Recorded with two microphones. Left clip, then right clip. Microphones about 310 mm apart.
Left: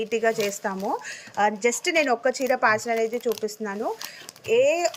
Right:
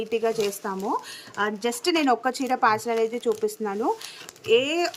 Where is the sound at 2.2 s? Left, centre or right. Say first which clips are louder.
Left 3 dB; right.